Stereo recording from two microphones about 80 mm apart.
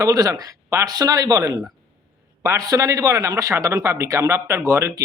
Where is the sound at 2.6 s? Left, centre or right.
Right.